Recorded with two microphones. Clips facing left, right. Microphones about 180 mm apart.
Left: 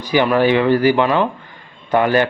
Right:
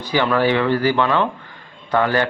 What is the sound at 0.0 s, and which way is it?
A man's voice, 15° left (ahead or behind).